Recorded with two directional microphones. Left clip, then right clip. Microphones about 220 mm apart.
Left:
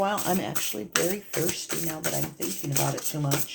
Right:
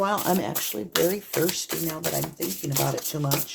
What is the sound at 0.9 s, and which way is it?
Speech, 20° right (ahead or behind).